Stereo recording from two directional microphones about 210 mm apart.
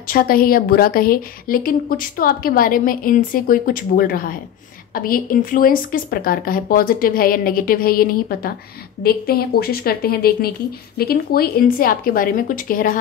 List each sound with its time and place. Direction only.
0.1 s a woman's voice: 45° left (ahead or behind)